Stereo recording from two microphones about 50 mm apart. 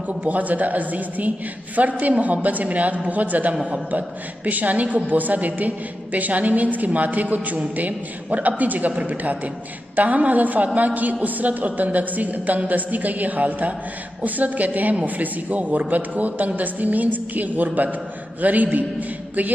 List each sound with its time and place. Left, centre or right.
0.3 s a woman's voice: right